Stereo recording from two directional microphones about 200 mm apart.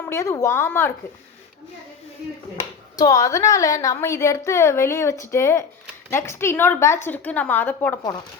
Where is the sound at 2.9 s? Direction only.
15° left (ahead or behind).